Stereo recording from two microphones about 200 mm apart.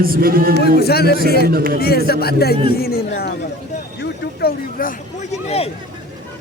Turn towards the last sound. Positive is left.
turn(degrees=30)  # may be behind; listen again after turning